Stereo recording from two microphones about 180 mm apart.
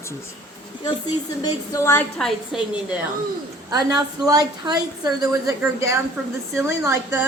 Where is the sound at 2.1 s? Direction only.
Centre (ahead or behind).